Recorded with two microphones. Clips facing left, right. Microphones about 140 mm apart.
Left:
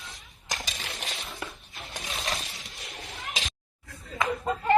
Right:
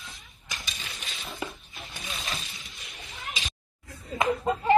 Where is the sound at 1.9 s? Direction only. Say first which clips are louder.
Left 3 dB; 75° left (ahead or behind).